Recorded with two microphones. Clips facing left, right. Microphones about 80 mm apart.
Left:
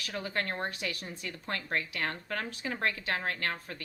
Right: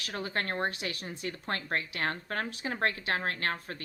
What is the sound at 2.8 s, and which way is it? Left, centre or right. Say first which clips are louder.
Speech: right 2 dB; right.